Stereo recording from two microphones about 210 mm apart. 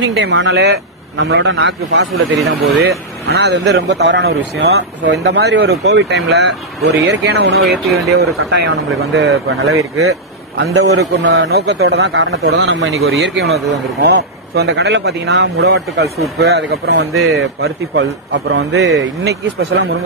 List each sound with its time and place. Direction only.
0.0 s a man's voice: 60° right (ahead or behind)
7.7 s speech: centre (ahead or behind)
8.5 s speech: 55° right (ahead or behind); by 9.8 s 75° right (ahead or behind)
10.5 s a man's voice: 55° right (ahead or behind)
14.0 s speech: 55° right (ahead or behind)
17.6 s a man's voice: 65° right (ahead or behind)